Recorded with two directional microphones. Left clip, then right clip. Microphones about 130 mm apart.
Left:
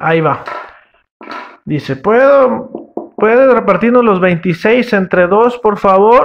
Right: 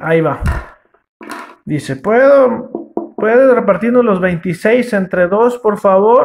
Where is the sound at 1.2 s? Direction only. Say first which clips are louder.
Left 2 dB; centre (ahead or behind).